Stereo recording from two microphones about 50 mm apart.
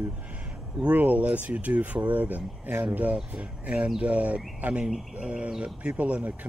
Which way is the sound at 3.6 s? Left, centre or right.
Right.